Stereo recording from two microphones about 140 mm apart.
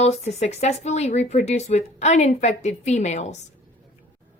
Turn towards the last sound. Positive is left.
turn(degrees=55)  # may be behind; listen again after turning